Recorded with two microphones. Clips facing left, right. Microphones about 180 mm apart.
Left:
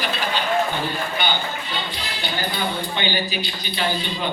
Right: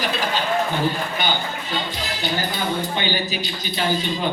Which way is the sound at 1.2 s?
45° right (ahead or behind).